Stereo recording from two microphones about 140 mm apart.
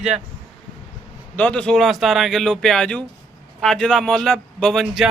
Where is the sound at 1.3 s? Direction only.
10° left (ahead or behind).